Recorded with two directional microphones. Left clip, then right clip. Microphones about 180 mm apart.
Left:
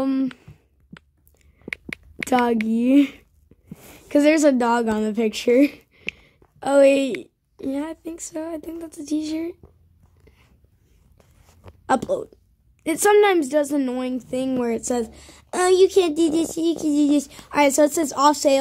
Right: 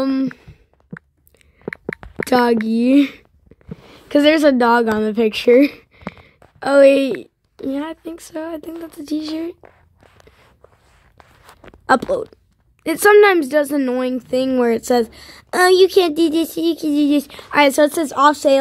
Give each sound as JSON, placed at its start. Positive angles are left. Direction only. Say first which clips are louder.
{"t": 0.0, "sound": "a sound", "louder": "right 4 dB", "side_deg": -10}
{"t": 2.2, "sound": "a woman's voice", "louder": "right 5 dB", "side_deg": -10}
{"t": 11.8, "sound": "speech", "louder": "right 6 dB", "side_deg": -20}